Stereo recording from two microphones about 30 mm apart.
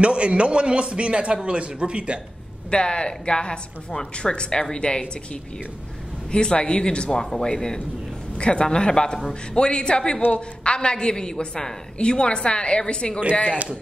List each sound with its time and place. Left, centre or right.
0.0 s a man's voice: right
2.7 s a woman's voice: left
7.2 s a man's voice: centre; by 13.2 s left